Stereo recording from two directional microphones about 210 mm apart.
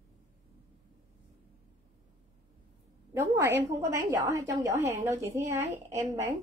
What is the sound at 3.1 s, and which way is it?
A woman's voice, 15° right (ahead or behind).